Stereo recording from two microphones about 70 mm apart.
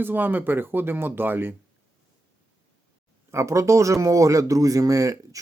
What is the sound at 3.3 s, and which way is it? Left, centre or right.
Speech, right.